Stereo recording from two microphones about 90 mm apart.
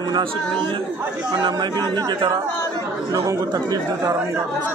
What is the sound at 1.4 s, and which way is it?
Speech, 50° right (ahead or behind).